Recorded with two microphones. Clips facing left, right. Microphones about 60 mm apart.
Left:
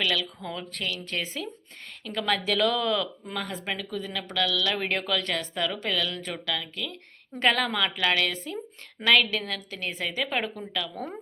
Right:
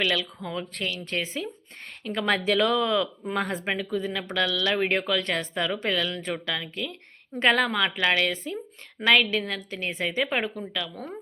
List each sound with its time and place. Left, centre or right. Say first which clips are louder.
0.0 s a woman's voice: right 2 dB; right
3.3 s speech: right 5 dB; right
3.7 s a woman's voice: right 4 dB; right; by 11.0 s centre